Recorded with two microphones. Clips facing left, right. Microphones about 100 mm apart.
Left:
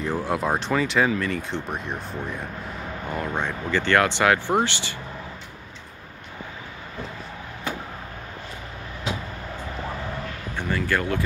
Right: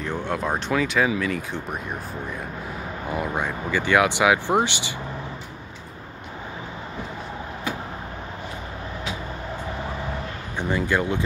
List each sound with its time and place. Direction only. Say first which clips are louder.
0.0 s speech: left 2 dB; 5° left (ahead or behind); by 4.9 s 15° right (ahead or behind)
10.6 s speech: right 2 dB; 15° right (ahead or behind)